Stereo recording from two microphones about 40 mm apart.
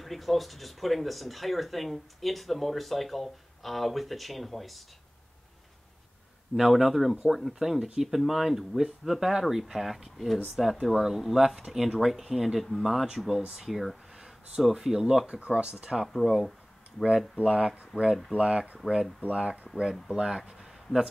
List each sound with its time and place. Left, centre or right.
0.0 s speech: centre
6.5 s speech: centre
14.1 s a sound: centre
14.6 s speech: centre
16.1 s speech: centre
17.4 s speech: right
17.9 s speech: centre
18.8 s speech: centre
20.1 s speech: centre
20.5 s a sound: centre